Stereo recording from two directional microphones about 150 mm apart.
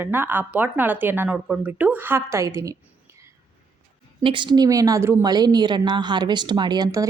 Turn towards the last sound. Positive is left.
turn(degrees=-25)  # may be behind; listen again after turning